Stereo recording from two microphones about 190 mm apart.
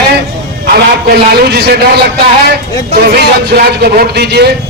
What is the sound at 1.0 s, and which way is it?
Speech, 55° right (ahead or behind).